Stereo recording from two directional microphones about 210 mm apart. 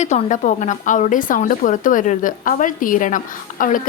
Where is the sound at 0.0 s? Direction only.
35° left (ahead or behind).